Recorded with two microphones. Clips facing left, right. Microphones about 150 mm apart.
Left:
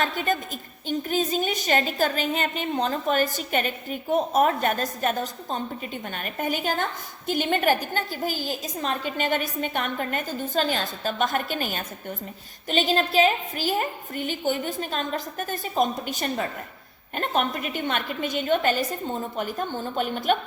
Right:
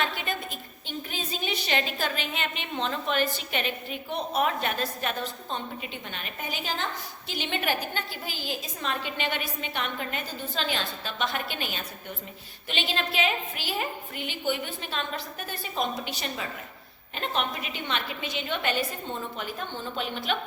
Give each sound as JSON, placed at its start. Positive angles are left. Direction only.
{"t": 0.0, "sound": "a woman's voice", "side_deg": 40}